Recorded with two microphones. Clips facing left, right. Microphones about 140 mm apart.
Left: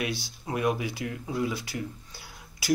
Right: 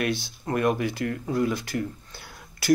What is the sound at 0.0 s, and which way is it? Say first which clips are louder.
Speech: right 5 dB; 5° left (ahead or behind).